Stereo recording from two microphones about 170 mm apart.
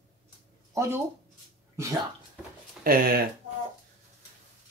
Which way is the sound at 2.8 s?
60° right (ahead or behind).